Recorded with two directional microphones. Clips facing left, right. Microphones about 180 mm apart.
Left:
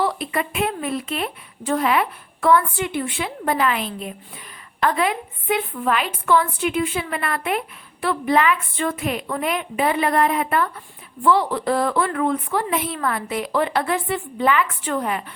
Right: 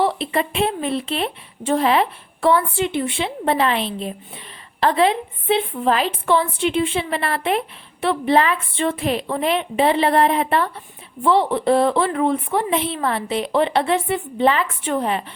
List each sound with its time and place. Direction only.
0.0 s a woman's voice: 25° right (ahead or behind)